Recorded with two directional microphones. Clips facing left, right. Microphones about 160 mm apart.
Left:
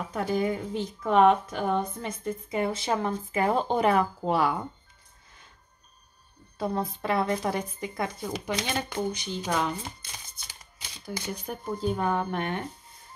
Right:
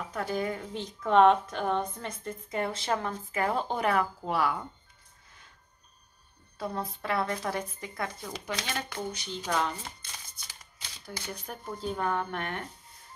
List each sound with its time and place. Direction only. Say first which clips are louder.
0.1 s a woman's voice: left 5 dB; 20° left (ahead or behind)
0.7 s a woman's voice: even; 5° left (ahead or behind); by 4.6 s 25° left (ahead or behind)
6.6 s speech: left 5 dB; 20° left (ahead or behind)
10.0 s shuffling cards: left 2 dB; 10° left (ahead or behind)
10.8 s a woman's voice: left 6 dB; 10° left (ahead or behind)